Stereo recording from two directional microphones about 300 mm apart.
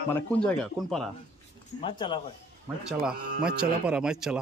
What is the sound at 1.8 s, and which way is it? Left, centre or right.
Speech, centre.